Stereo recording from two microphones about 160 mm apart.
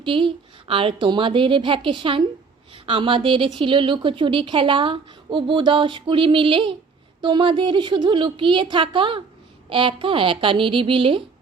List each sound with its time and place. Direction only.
0.0 s speech: 35° right (ahead or behind)